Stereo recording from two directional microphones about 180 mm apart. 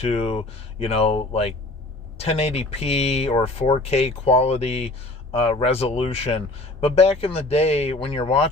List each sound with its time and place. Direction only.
0.0 s speech: 35° left (ahead or behind)